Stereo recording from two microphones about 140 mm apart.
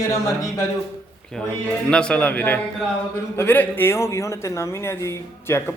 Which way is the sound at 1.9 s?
5° left (ahead or behind).